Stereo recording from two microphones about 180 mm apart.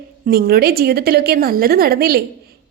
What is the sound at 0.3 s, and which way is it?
A woman's voice, 60° right (ahead or behind).